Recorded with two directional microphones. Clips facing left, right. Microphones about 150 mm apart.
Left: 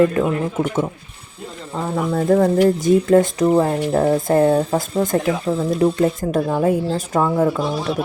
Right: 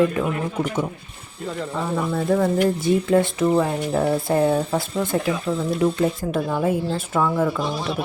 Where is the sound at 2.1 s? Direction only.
45° left (ahead or behind).